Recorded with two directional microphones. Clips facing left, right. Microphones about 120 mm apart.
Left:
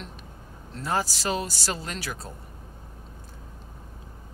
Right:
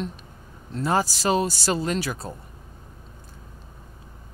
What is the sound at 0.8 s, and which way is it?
Speech, 25° right (ahead or behind).